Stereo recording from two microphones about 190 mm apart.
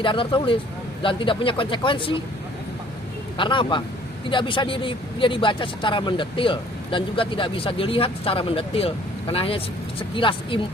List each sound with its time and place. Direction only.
0.0 s a man's voice: 25° left (ahead or behind)
3.3 s a man's voice: 25° left (ahead or behind)